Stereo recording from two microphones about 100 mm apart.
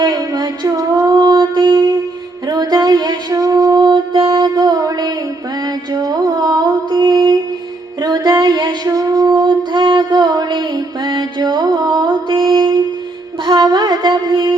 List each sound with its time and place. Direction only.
0.0 s music: 40° right (ahead or behind)
2.5 s mantra: 40° right (ahead or behind)
8.0 s music: 40° right (ahead or behind)
13.4 s a sound: 45° right (ahead or behind)